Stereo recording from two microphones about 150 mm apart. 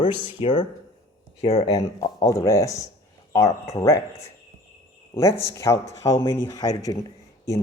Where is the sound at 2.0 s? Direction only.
25° left (ahead or behind).